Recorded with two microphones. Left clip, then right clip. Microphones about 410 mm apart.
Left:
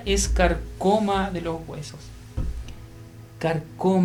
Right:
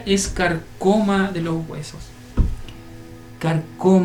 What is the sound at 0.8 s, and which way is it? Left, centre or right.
Speech, left.